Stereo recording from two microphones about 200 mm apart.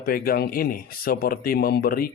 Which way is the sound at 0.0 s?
50° left (ahead or behind).